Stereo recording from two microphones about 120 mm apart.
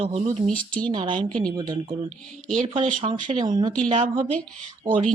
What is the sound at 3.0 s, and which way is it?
Speech, 55° right (ahead or behind).